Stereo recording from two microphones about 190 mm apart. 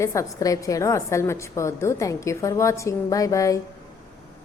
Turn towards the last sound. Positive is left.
turn(degrees=15)  # may be behind; listen again after turning